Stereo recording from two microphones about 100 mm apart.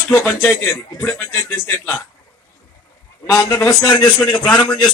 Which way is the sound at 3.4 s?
30° left (ahead or behind).